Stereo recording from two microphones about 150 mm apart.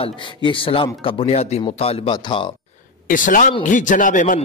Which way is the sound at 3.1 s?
60° left (ahead or behind).